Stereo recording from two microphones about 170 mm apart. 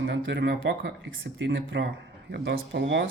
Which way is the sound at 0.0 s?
85° right.